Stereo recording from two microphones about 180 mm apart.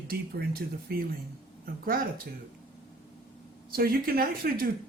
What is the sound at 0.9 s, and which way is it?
Speech, 55° right (ahead or behind).